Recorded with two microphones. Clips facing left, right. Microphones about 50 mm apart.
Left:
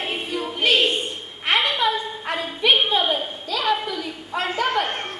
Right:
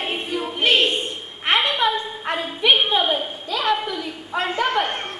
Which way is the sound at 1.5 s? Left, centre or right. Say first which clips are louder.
Right 1 dB; centre.